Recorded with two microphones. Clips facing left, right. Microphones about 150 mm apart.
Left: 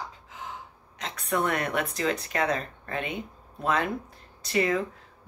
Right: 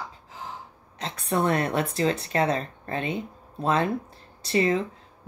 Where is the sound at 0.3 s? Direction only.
30° right (ahead or behind).